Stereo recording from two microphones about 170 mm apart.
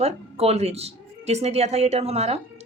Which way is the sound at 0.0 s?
35° right (ahead or behind).